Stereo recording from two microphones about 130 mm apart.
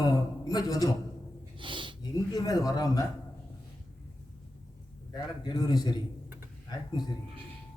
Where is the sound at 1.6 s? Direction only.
40° right (ahead or behind).